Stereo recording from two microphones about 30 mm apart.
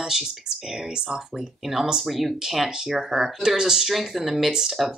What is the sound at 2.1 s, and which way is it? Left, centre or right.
Speech, centre.